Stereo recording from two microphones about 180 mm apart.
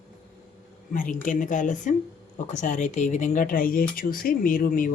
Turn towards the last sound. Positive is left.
turn(degrees=50)  # may be behind; listen again after turning